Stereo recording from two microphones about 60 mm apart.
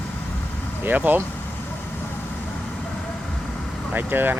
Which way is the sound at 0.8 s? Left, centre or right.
Right.